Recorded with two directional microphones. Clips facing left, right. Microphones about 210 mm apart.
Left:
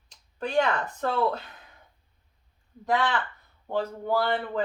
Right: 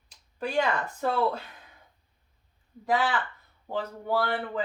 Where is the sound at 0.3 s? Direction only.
5° right (ahead or behind).